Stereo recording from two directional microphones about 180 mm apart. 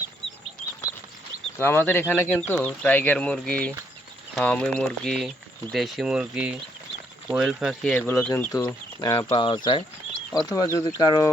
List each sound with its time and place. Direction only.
1.5 s speech: 10° left (ahead or behind)
7.9 s speech: 10° left (ahead or behind)